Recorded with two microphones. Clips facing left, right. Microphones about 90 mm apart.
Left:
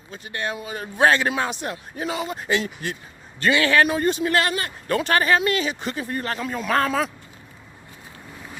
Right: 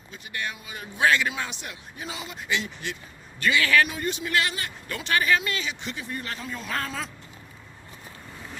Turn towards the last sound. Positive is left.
turn(degrees=65)  # may be behind; listen again after turning